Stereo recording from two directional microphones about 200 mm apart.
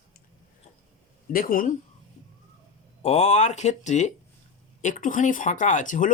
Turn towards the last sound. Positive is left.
turn(degrees=40)  # may be behind; listen again after turning